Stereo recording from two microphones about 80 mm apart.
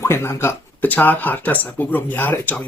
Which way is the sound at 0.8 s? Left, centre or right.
Left.